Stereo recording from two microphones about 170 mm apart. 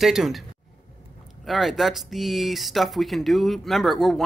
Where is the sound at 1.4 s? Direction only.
Centre (ahead or behind).